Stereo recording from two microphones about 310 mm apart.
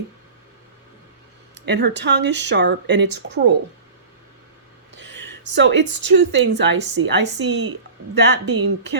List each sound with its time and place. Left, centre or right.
1.6 s speech: right
4.9 s speech: right